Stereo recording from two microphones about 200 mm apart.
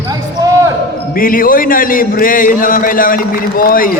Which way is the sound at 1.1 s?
45° left (ahead or behind).